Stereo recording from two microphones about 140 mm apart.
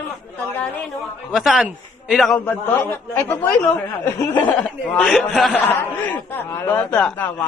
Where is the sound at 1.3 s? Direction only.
Centre (ahead or behind).